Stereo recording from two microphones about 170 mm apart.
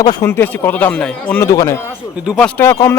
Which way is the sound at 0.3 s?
10° left (ahead or behind).